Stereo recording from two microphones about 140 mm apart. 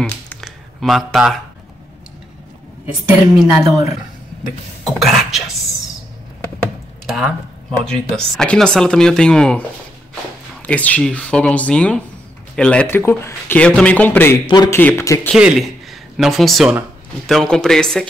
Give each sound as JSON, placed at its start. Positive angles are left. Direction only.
{"t": 0.0, "sound": "a sound", "side_deg": 0}
{"t": 3.4, "sound": "speech", "side_deg": -20}
{"t": 4.8, "sound": "speech", "side_deg": 0}
{"t": 7.1, "sound": "a sound", "side_deg": 0}
{"t": 7.8, "sound": "a man's voice", "side_deg": 5}
{"t": 12.8, "sound": "a man's voice", "side_deg": 20}
{"t": 14.4, "sound": "speech", "side_deg": 30}
{"t": 14.8, "sound": "speech", "side_deg": 15}
{"t": 15.3, "sound": "a man's voice", "side_deg": 0}